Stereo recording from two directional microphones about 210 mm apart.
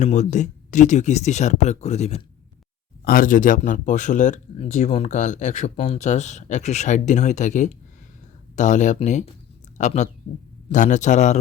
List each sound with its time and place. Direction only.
0.0 s speech: 35° left (ahead or behind)
3.0 s speech: 45° left (ahead or behind)